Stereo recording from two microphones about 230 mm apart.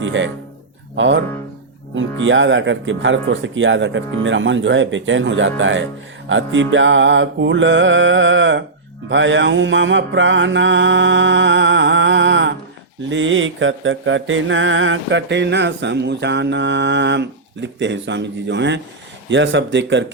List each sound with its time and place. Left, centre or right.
0.0 s mantra: right
2.0 s speech: right
9.0 s mantra: right